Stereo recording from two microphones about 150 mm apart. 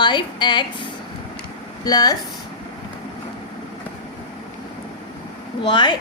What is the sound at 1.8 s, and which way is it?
Speech, 25° left (ahead or behind).